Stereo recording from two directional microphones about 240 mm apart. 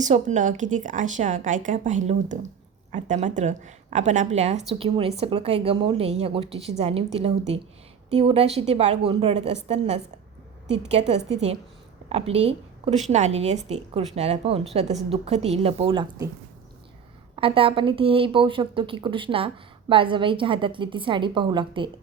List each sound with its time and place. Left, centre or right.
0.0 s a woman's voice: right
17.3 s a woman's voice: right